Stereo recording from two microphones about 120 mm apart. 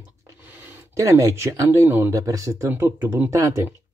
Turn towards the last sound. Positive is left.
turn(degrees=-25)  # may be behind; listen again after turning